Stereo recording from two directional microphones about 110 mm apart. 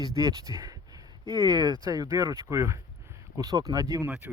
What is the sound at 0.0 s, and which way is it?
Speech, 30° right (ahead or behind).